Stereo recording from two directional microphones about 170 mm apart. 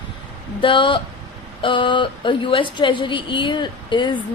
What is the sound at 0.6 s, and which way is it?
A woman's voice, 30° left (ahead or behind).